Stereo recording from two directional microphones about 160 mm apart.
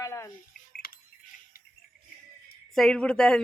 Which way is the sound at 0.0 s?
20° left (ahead or behind).